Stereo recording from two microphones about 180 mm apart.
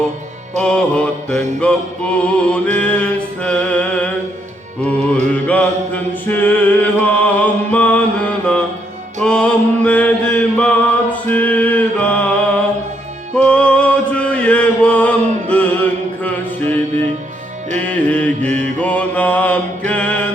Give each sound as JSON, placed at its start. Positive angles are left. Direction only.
{"t": 0.6, "sound": "mantra", "side_deg": 5}
{"t": 2.1, "sound": "music", "side_deg": 5}
{"t": 5.3, "sound": "mantra", "side_deg": 10}
{"t": 9.2, "sound": "mantra", "side_deg": 5}
{"t": 13.3, "sound": "chant", "side_deg": 5}
{"t": 17.7, "sound": "music", "side_deg": 5}
{"t": 18.4, "sound": "mantra", "side_deg": -40}
{"t": 18.8, "sound": "mantra", "side_deg": 5}
{"t": 19.9, "sound": "music", "side_deg": 5}